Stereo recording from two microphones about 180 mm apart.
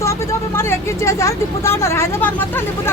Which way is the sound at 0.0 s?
15° left (ahead or behind).